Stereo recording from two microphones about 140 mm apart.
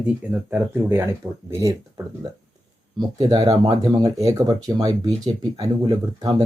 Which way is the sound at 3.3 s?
30° right (ahead or behind).